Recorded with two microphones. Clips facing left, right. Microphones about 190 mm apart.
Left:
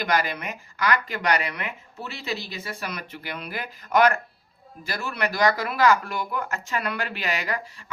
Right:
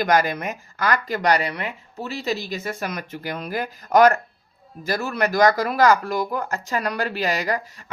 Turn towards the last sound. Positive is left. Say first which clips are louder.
# right 5 dB
turn(degrees=-40)  # may be behind; listen again after turning